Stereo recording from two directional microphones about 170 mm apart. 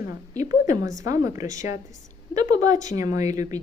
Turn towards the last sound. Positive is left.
turn(degrees=-20)  # may be behind; listen again after turning